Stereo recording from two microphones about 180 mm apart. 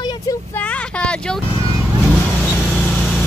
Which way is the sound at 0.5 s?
5° left (ahead or behind).